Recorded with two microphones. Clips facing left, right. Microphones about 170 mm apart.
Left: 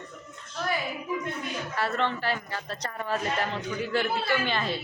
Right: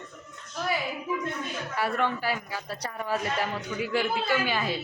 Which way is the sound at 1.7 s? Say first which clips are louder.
Right 1 dB; 10° right (ahead or behind).